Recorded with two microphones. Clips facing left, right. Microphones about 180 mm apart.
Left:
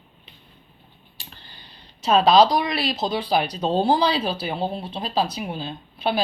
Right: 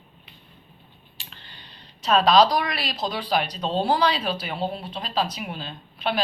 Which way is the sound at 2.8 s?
Centre (ahead or behind).